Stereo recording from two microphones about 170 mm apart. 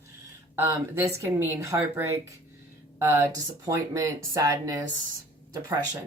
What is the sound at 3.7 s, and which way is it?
Speech, 20° right (ahead or behind).